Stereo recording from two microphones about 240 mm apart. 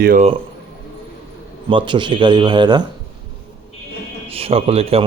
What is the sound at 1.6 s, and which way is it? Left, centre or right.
A man's voice, centre.